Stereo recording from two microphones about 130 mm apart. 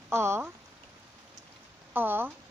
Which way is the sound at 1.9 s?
15° right (ahead or behind).